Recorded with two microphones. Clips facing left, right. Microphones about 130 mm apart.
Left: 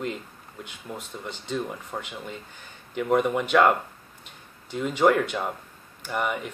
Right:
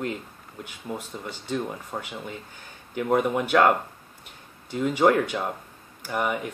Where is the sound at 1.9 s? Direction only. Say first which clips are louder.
Right 1 dB; 10° right (ahead or behind).